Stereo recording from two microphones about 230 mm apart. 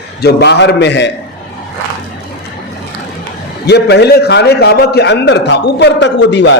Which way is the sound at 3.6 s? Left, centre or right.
Left.